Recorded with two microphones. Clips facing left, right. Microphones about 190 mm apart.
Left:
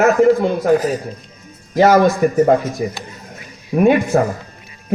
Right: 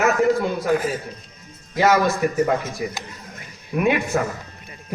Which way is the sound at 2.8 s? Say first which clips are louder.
Left 5 dB; 35° left (ahead or behind).